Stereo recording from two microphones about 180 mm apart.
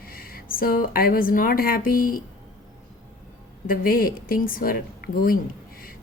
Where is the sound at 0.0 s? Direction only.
55° left (ahead or behind).